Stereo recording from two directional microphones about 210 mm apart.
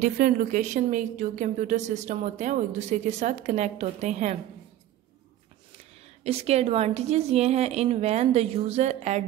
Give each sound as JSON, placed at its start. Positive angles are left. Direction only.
{"t": 0.0, "sound": "a woman's voice", "side_deg": -40}
{"t": 6.2, "sound": "a woman's voice", "side_deg": -30}